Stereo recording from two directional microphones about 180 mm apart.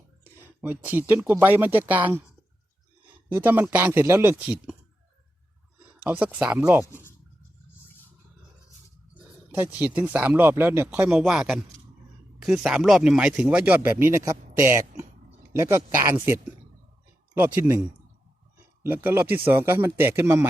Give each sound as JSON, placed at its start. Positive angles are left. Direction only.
{"t": 0.3, "sound": "speech", "side_deg": -10}
{"t": 3.3, "sound": "speech", "side_deg": -10}
{"t": 5.9, "sound": "speech", "side_deg": -10}
{"t": 6.8, "sound": "speech", "side_deg": 15}
{"t": 9.1, "sound": "speech", "side_deg": -10}
{"t": 18.8, "sound": "speech", "side_deg": -10}